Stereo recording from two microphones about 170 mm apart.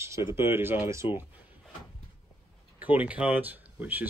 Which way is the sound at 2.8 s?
10° right (ahead or behind).